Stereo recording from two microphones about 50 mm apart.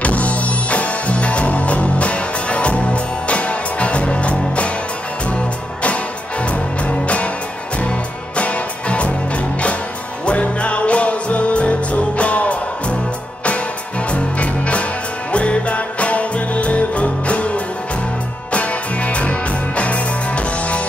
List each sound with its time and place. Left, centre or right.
0.0 s music: left
6.4 s music: left
10.2 s music: left
14.1 s music: left
18.5 s music: left